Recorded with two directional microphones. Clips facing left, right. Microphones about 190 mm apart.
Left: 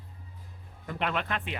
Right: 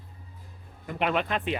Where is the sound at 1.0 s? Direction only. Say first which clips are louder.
Right 5 dB; 15° right (ahead or behind).